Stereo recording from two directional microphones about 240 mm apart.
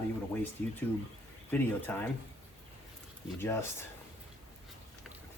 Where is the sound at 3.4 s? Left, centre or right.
Centre.